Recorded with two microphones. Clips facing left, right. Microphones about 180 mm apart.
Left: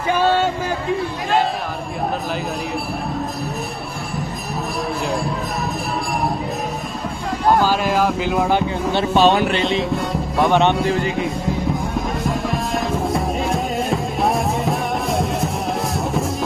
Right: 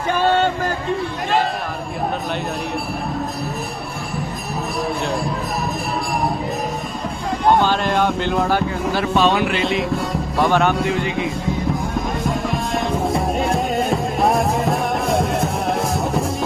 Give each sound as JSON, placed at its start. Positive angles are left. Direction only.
{"t": 7.4, "sound": "a sound", "side_deg": 5}
{"t": 8.5, "sound": "speech", "side_deg": 20}
{"t": 9.8, "sound": "music", "side_deg": 0}
{"t": 10.9, "sound": "speech", "side_deg": 40}
{"t": 11.8, "sound": "music", "side_deg": 0}